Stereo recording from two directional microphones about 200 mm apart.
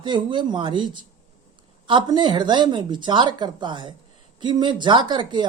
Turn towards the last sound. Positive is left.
turn(degrees=-20)  # may be behind; listen again after turning